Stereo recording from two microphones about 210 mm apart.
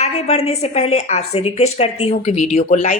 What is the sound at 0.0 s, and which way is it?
A woman's voice, 30° left (ahead or behind).